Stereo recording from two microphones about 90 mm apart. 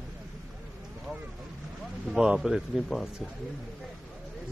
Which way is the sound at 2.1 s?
5° right (ahead or behind).